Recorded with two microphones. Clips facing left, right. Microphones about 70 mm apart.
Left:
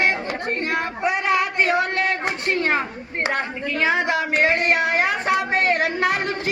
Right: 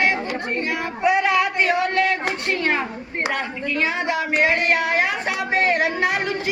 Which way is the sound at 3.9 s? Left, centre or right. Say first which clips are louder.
Left 2 dB; left.